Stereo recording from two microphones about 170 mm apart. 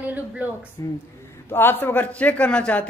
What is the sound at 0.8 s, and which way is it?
A woman's voice, 20° left (ahead or behind).